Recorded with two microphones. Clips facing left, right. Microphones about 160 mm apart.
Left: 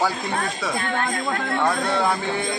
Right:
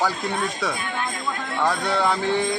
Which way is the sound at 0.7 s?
55° left (ahead or behind).